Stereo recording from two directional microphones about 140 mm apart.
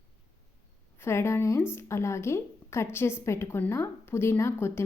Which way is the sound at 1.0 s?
15° left (ahead or behind).